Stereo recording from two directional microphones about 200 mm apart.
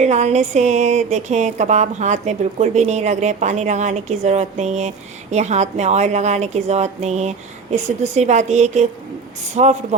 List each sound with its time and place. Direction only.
0.0 s speech: 35° right (ahead or behind)